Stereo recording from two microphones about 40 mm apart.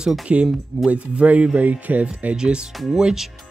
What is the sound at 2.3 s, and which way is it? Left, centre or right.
Speech, right.